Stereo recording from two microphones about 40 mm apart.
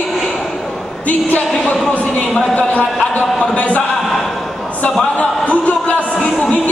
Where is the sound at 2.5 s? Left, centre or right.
Left.